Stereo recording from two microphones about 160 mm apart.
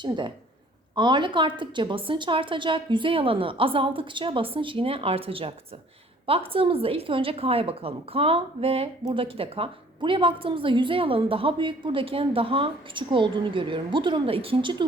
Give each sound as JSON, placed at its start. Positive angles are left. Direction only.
{"t": 0.0, "sound": "a woman's voice", "side_deg": -30}